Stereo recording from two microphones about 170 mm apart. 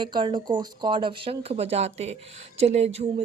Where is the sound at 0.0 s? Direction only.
25° right (ahead or behind).